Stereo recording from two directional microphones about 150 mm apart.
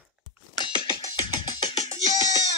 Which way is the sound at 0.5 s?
30° left (ahead or behind).